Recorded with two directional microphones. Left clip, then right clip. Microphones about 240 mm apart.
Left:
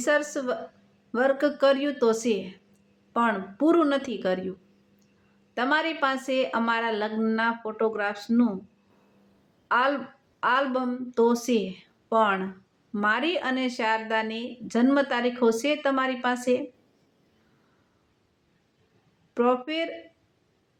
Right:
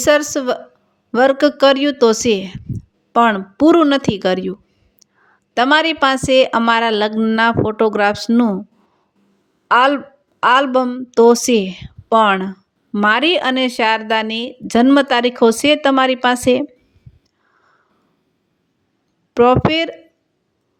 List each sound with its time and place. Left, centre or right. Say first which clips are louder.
0.0 s a woman's voice: right 11 dB; right
5.5 s a woman's voice: right 12 dB; right
9.6 s a woman's voice: right 11 dB; right
19.3 s a woman's voice: right 12 dB; right